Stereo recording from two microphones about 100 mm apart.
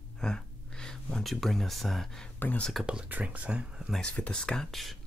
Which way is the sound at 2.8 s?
10° right (ahead or behind).